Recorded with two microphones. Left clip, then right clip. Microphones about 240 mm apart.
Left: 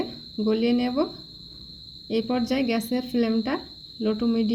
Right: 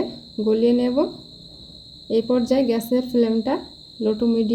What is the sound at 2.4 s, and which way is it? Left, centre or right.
Speech, left.